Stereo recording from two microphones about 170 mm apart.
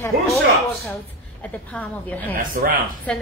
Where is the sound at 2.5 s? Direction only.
55° right (ahead or behind).